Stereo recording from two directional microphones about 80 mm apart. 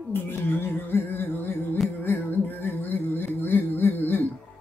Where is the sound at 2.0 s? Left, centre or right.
Left.